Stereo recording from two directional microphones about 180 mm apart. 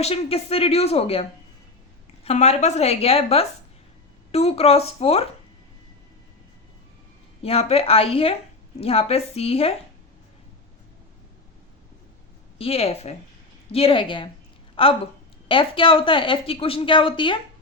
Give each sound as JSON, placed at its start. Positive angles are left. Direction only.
{"t": 0.0, "sound": "speech", "side_deg": 35}
{"t": 7.4, "sound": "speech", "side_deg": 35}
{"t": 12.5, "sound": "a woman's voice", "side_deg": 35}